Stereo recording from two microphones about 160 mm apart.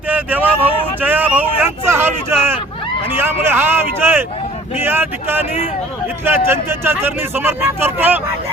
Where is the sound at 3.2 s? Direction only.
15° right (ahead or behind).